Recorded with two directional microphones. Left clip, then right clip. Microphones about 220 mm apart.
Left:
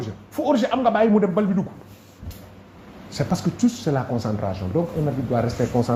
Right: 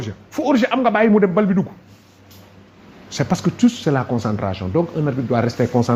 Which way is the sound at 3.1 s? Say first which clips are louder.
Right 4 dB; 40° right (ahead or behind).